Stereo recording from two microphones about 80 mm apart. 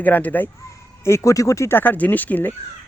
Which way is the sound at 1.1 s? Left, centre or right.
Left.